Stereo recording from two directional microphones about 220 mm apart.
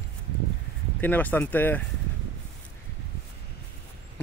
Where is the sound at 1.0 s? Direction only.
10° left (ahead or behind).